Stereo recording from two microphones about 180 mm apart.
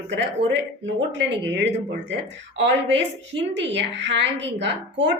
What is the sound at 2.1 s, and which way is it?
Speech, 85° right.